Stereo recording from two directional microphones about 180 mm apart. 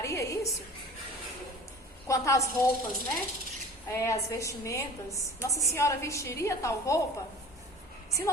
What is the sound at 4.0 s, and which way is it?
A woman's voice, 15° left (ahead or behind).